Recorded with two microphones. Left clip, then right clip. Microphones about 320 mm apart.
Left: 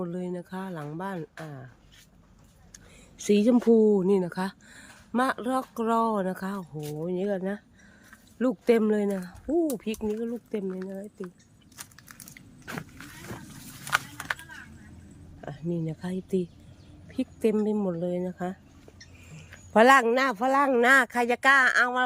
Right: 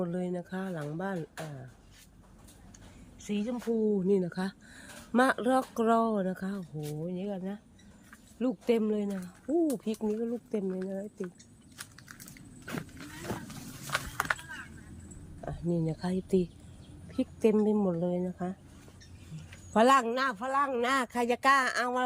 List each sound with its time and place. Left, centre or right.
0.0 s speech: centre
2.7 s a sound: centre
3.7 s speech: left
3.9 s speech: centre
9.5 s speech: centre
15.4 s speech: centre